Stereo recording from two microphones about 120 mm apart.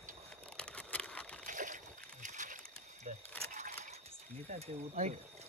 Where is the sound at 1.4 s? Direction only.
90° right.